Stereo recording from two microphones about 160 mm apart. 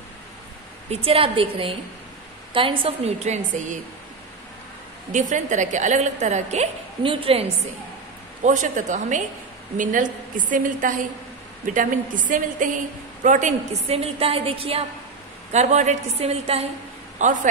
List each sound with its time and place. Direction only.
0.8 s a woman's voice: 35° right (ahead or behind)
5.3 s a woman's voice: 50° right (ahead or behind)
8.5 s a woman's voice: 50° right (ahead or behind)
15.5 s a woman's voice: 45° right (ahead or behind)
17.2 s a woman's voice: 55° right (ahead or behind)